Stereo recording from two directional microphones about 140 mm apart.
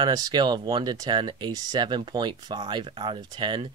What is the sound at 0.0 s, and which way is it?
Speech, 30° right (ahead or behind).